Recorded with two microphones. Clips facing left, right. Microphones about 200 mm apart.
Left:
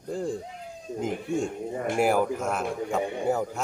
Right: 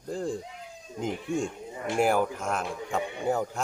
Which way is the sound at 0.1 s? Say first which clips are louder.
Left 1 dB; centre (ahead or behind).